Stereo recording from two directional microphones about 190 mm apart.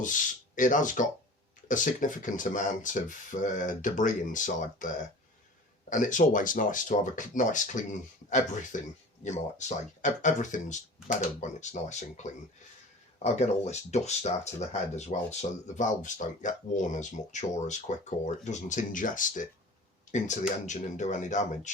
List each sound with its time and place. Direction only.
0.0 s speech: 45° left (ahead or behind)